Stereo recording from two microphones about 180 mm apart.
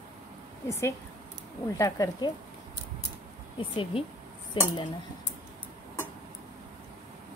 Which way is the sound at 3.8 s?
30° left (ahead or behind).